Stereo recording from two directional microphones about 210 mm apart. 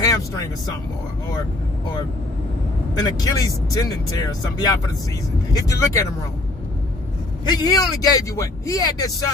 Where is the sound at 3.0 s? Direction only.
20° left (ahead or behind).